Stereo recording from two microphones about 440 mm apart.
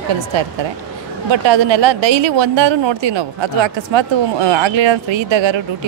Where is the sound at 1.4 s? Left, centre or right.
Right.